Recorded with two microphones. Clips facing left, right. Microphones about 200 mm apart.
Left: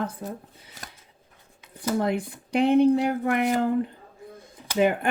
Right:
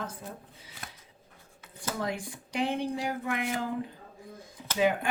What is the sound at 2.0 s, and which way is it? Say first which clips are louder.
Speech: left 7 dB; 60° left (ahead or behind).